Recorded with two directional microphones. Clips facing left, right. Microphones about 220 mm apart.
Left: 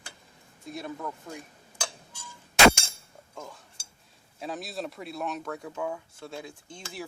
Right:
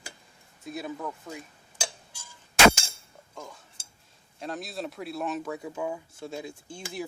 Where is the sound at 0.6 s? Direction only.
5° right (ahead or behind).